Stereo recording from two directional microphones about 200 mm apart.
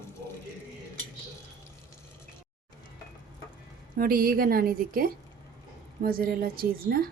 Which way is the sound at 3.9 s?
45° right (ahead or behind).